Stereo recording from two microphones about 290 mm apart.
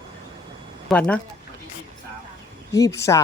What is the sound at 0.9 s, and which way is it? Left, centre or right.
Speech, centre.